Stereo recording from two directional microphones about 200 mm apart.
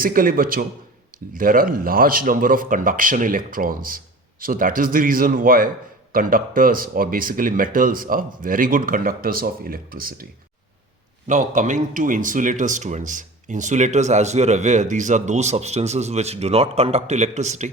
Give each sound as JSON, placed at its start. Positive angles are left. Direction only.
{"t": 0.0, "sound": "speech", "side_deg": -45}
{"t": 11.3, "sound": "a man's voice", "side_deg": -40}